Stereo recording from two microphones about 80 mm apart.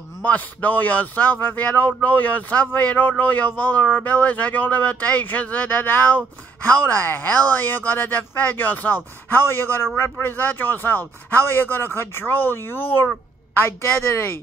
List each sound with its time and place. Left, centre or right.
0.2 s speech: centre